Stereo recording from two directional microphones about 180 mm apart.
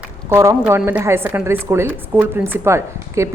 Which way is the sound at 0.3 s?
15° right (ahead or behind).